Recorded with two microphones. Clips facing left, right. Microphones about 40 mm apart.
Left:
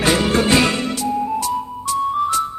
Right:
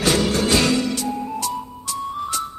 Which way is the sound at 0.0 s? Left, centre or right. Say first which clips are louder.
Left 3 dB; left.